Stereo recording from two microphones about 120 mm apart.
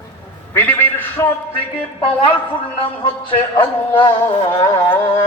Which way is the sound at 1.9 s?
45° left (ahead or behind).